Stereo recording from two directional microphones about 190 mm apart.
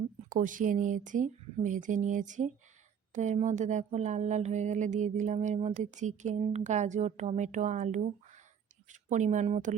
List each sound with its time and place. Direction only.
0.3 s speech: 45° right (ahead or behind)